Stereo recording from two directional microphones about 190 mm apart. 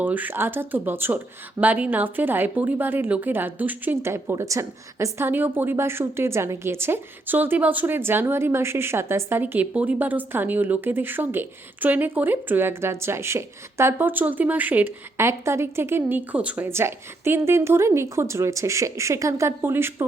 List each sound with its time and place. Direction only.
0.0 s a woman's voice: 10° right (ahead or behind)